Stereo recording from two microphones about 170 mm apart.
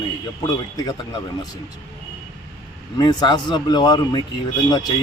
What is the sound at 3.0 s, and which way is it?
A man's voice, 25° left (ahead or behind).